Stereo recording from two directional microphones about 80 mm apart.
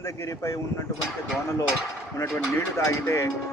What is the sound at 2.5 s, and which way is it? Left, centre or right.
Speech, left.